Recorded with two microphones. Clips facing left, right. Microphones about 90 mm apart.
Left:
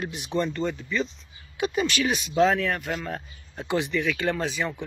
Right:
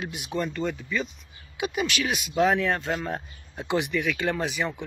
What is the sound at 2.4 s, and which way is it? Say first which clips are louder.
Speech: left 1 dB; 20° right (ahead or behind).